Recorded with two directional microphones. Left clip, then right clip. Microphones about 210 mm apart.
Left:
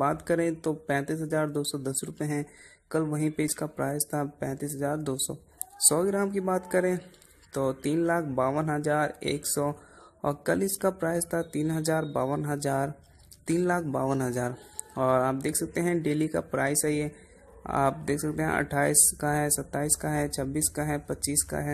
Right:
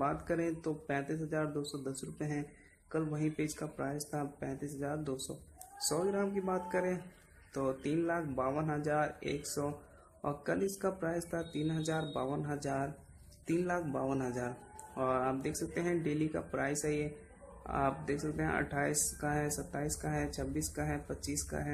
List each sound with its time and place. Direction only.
0.0 s speech: 35° left (ahead or behind)